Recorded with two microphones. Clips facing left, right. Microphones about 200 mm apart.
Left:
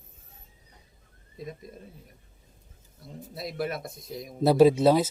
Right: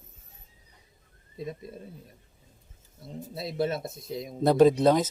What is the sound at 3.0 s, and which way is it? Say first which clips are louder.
Speech: right 2 dB; 25° right (ahead or behind).